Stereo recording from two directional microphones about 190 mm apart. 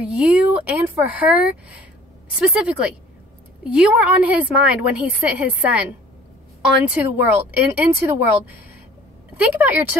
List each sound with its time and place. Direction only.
0.0 s a woman's voice: 5° right (ahead or behind)